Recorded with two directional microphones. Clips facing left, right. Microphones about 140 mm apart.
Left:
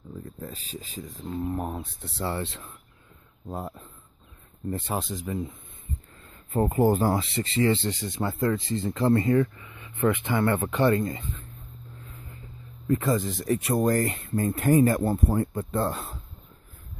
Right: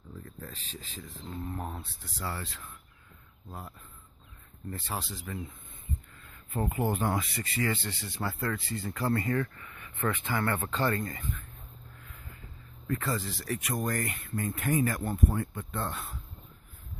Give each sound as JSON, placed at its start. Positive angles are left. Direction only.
{"t": 0.2, "sound": "speech", "side_deg": 15}
{"t": 4.6, "sound": "speech", "side_deg": 20}
{"t": 6.2, "sound": "speech", "side_deg": 35}
{"t": 12.0, "sound": "vehicle", "side_deg": 30}
{"t": 12.8, "sound": "speech", "side_deg": 20}